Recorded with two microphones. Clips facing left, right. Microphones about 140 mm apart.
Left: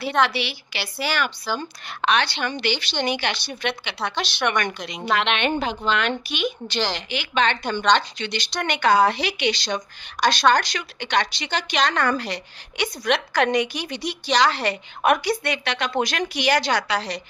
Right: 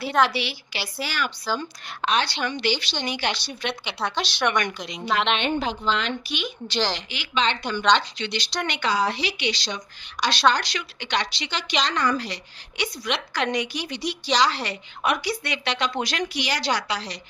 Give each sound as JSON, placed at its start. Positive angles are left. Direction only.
{"t": 0.1, "sound": "a woman's voice", "side_deg": 0}
{"t": 0.3, "sound": "a woman's voice", "side_deg": 65}